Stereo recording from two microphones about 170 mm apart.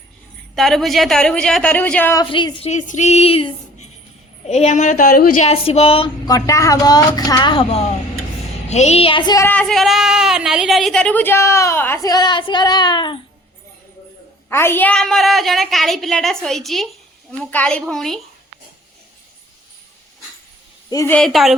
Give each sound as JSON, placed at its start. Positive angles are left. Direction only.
{"t": 0.5, "sound": "a woman's voice", "side_deg": 0}
{"t": 2.1, "sound": "speech", "side_deg": 25}
{"t": 2.6, "sound": "a woman's voice", "side_deg": 45}
{"t": 5.4, "sound": "speech", "side_deg": 40}
{"t": 8.7, "sound": "speech", "side_deg": 40}
{"t": 9.5, "sound": "a woman's voice", "side_deg": 5}
{"t": 14.5, "sound": "a woman's voice", "side_deg": 15}
{"t": 20.9, "sound": "a woman's voice", "side_deg": 15}
{"t": 21.2, "sound": "a woman's voice", "side_deg": 0}